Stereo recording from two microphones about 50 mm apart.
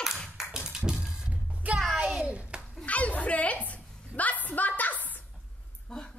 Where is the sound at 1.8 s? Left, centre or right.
Centre.